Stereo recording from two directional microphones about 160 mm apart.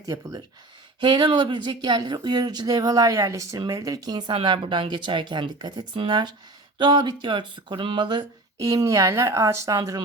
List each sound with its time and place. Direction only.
0.0 s speech: 20° right (ahead or behind)